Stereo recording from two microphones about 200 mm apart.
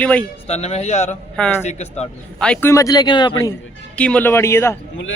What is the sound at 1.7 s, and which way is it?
Speech, 35° left (ahead or behind).